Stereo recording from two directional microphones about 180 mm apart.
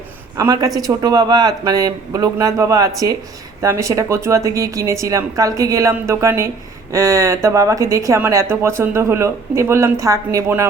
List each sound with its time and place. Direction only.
0.3 s a man's voice: 20° right (ahead or behind)